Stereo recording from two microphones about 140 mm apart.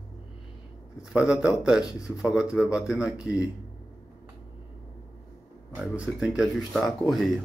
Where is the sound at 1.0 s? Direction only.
5° right (ahead or behind).